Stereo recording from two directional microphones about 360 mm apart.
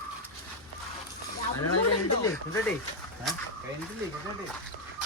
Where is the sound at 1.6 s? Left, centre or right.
Left.